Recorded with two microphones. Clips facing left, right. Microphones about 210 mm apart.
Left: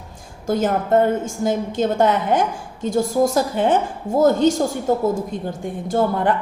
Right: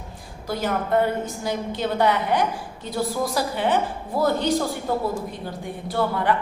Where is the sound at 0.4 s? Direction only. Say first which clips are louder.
Left 6 dB; 45° left (ahead or behind).